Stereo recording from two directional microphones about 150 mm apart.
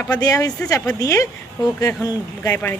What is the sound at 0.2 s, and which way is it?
A woman's voice, 25° left (ahead or behind).